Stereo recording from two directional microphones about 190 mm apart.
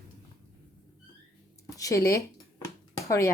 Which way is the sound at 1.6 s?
15° left (ahead or behind).